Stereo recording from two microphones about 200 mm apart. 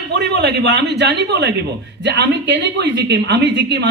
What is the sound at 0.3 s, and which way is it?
A woman's voice, 55° right (ahead or behind).